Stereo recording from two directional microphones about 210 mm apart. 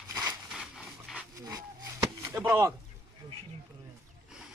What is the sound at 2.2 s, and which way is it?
Chop, 10° right (ahead or behind).